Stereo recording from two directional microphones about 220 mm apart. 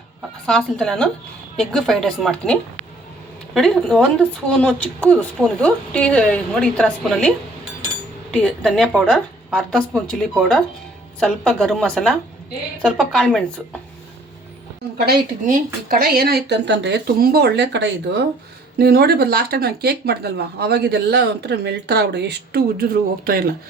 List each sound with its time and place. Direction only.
0.4 s speech: centre (ahead or behind)
14.9 s speech: 40° right (ahead or behind)